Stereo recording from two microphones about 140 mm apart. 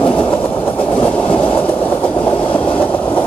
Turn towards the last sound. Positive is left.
turn(degrees=10)  # may be behind; listen again after turning